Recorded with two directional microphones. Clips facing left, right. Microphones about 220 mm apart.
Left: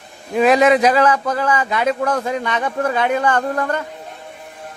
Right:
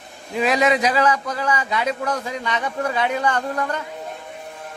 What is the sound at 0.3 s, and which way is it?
A man's voice, 50° left (ahead or behind).